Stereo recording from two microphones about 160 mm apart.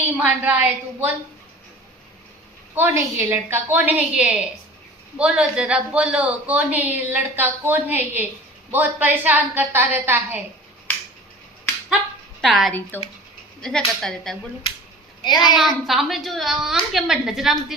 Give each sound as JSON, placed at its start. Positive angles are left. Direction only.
{"t": 0.2, "sound": "a man's voice", "side_deg": -10}
{"t": 2.7, "sound": "a man's voice", "side_deg": -15}
{"t": 12.4, "sound": "a woman's voice", "side_deg": 0}
{"t": 12.9, "sound": "a woman's voice", "side_deg": 10}
{"t": 15.2, "sound": "a child's voice", "side_deg": 25}
{"t": 15.5, "sound": "a woman's voice", "side_deg": 0}